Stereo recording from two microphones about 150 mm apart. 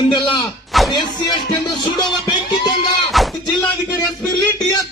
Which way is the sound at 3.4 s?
25° left (ahead or behind).